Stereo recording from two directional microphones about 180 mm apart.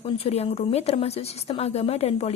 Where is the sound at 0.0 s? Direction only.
35° left (ahead or behind).